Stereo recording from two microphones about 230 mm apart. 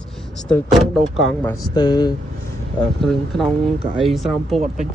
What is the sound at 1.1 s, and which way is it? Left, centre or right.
Speech, centre.